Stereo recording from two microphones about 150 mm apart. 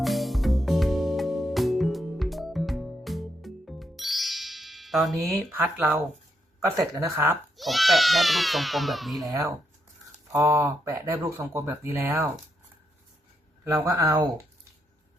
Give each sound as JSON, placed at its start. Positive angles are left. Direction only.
{"t": 0.0, "sound": "music", "side_deg": 0}
{"t": 5.5, "sound": "speech", "side_deg": -15}
{"t": 7.5, "sound": "speech", "side_deg": 0}
{"t": 9.3, "sound": "speech", "side_deg": -20}
{"t": 13.7, "sound": "speech", "side_deg": -20}